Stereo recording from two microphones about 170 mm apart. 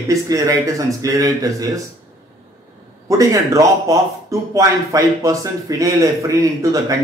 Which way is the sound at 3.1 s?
20° right (ahead or behind).